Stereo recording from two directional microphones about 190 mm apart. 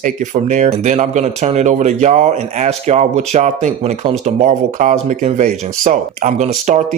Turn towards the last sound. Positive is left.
turn(degrees=-40)  # may be behind; listen again after turning